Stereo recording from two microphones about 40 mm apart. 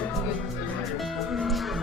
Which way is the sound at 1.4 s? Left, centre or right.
Centre.